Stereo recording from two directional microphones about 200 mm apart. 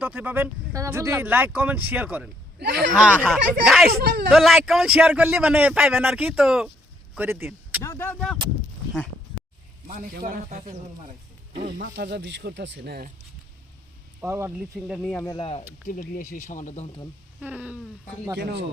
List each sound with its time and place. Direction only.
0.0 s a man's voice: 10° right (ahead or behind)
4.0 s speech: 55° right (ahead or behind)
4.3 s a man's voice: centre (ahead or behind)
7.8 s speech: 10° left (ahead or behind)
9.8 s a man's voice: 45° right (ahead or behind)
11.9 s speech: 60° right (ahead or behind)
14.2 s a man's voice: 15° right (ahead or behind); by 15.3 s centre (ahead or behind)
15.3 s speech: 30° left (ahead or behind)
15.9 s speech: 40° left (ahead or behind)
17.4 s speech: 5° right (ahead or behind)
18.3 s a man's voice: 55° right (ahead or behind)